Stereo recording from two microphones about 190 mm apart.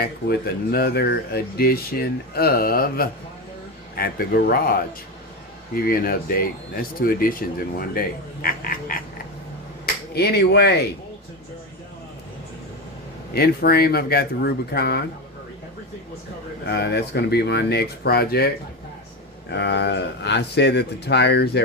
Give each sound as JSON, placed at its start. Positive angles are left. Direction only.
{"t": 0.0, "sound": "speech", "side_deg": 55}
{"t": 9.8, "sound": "speech", "side_deg": 60}
{"t": 13.3, "sound": "speech", "side_deg": 55}
{"t": 16.6, "sound": "speech", "side_deg": 60}